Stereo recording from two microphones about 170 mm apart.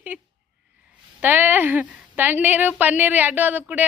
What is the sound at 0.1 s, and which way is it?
A woman's voice, 10° right (ahead or behind).